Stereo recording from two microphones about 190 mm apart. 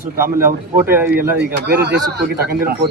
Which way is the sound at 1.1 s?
55° right (ahead or behind).